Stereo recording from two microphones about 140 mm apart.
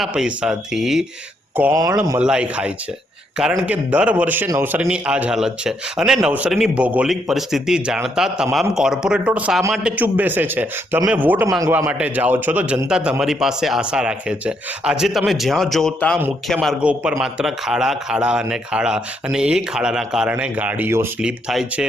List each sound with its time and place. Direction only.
0.0 s speech: 5° right (ahead or behind)
1.7 s a man's voice: 20° right (ahead or behind)
2.1 s a man's voice: 5° right (ahead or behind)
11.6 s a man's voice: 25° right (ahead or behind)
11.9 s a man's voice: 10° right (ahead or behind)
16.8 s a man's voice: 10° right (ahead or behind)